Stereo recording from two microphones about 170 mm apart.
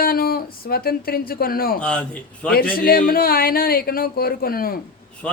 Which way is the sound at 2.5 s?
60° left (ahead or behind).